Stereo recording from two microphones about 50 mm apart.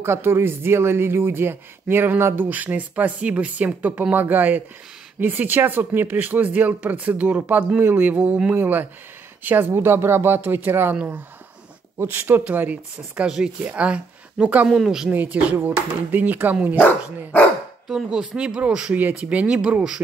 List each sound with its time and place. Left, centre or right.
0.0 s speech: right
2.5 s speech: right
9.7 s speech: right
12.0 s speech: right
12.9 s speech: right
14.7 s speech: centre
15.0 s speech: right
16.8 s dog: left
17.8 s speech: centre
18.3 s speech: centre